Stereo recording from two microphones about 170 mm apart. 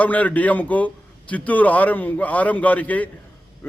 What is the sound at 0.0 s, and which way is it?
A man's voice, 10° left (ahead or behind).